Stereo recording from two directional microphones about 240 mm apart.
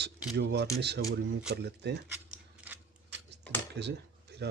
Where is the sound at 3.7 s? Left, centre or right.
Right.